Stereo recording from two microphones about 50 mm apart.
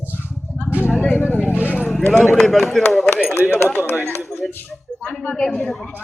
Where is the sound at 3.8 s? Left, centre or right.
Left.